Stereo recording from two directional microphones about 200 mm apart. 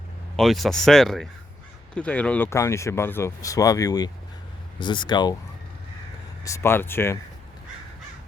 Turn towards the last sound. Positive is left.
turn(degrees=10)  # may be behind; listen again after turning